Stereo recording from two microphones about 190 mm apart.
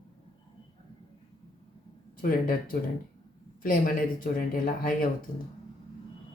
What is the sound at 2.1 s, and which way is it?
Speech, 50° left (ahead or behind).